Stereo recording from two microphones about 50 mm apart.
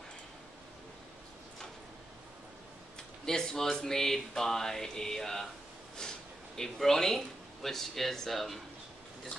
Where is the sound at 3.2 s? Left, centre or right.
Centre.